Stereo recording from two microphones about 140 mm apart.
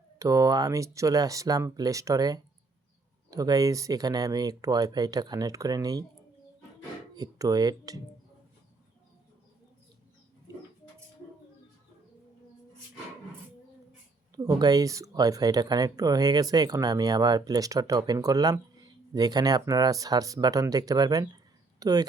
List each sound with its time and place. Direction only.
0.2 s speech: 25° right (ahead or behind)
7.1 s speech: 30° right (ahead or behind)
14.3 s speech: 30° right (ahead or behind)